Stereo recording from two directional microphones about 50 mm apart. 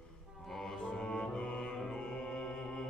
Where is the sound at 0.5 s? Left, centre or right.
Centre.